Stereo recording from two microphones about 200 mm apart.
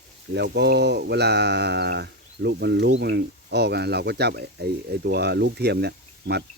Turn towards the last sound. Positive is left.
turn(degrees=-55)  # may be behind; listen again after turning